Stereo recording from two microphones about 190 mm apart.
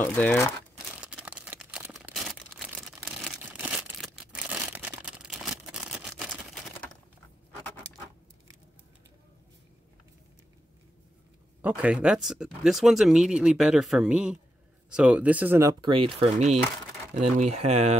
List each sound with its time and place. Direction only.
0.0 s speech: 10° left (ahead or behind)
1.0 s a sound: 5° right (ahead or behind)
11.6 s speech: 5° right (ahead or behind)
15.8 s speech: 25° right (ahead or behind)